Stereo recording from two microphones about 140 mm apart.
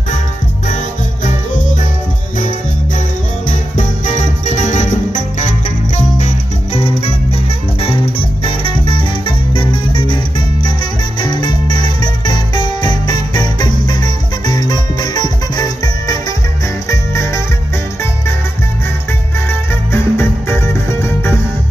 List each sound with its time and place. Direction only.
3.4 s music: 60° left (ahead or behind); by 10.1 s 35° left (ahead or behind)
11.1 s music: 35° left (ahead or behind)
19.9 s music: 15° left (ahead or behind)